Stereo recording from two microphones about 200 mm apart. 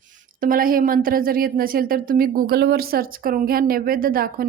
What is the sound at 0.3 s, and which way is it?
Speech, 45° right (ahead or behind).